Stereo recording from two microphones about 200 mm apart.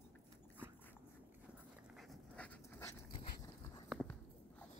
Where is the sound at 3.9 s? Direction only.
5° left (ahead or behind).